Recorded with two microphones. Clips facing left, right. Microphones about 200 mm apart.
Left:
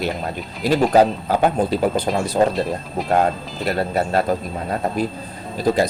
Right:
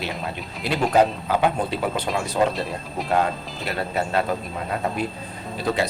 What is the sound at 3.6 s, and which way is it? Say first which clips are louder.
Speech: left 5 dB; 40° left (ahead or behind).